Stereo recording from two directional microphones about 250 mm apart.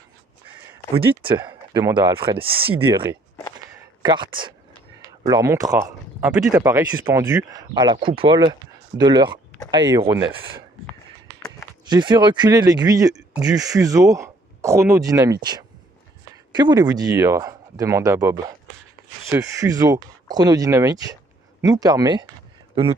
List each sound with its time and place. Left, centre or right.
0.9 s speech: centre
11.9 s speech: centre
13.1 s speech: centre
13.5 s speech: centre